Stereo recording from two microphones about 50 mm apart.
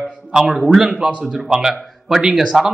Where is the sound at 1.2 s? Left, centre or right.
Centre.